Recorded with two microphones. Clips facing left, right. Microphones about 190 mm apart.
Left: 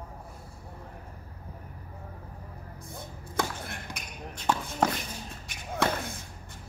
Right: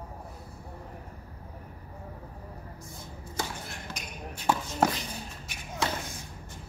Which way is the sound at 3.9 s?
15° left (ahead or behind).